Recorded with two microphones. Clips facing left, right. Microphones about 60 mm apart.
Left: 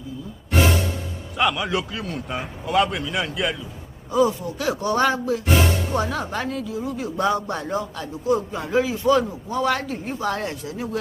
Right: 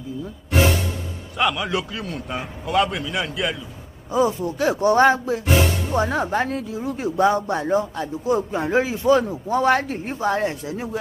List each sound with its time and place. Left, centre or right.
1.4 s a man's voice: centre
4.1 s speech: right
7.2 s speech: right